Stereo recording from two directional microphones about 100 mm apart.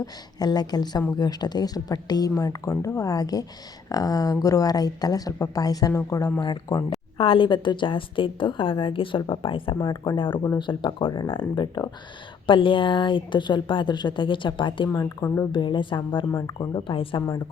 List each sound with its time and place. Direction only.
0.0 s a woman's voice: 40° left (ahead or behind)
7.2 s a woman's voice: 60° left (ahead or behind)
9.7 s a woman's voice: 40° left (ahead or behind)
10.2 s a woman's voice: 55° left (ahead or behind)
14.9 s speech: 30° left (ahead or behind)
15.5 s a woman's voice: 50° left (ahead or behind)